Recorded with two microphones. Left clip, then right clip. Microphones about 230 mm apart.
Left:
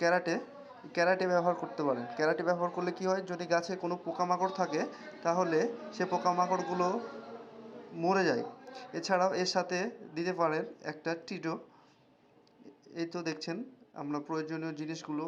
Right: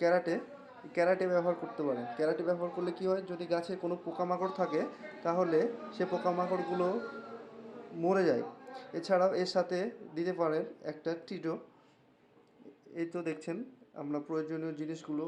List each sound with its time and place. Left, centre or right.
0.0 s speech: centre
8.0 s speech: centre
13.1 s speech: centre